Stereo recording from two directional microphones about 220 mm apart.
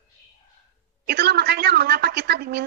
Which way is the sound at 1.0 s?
45° right (ahead or behind).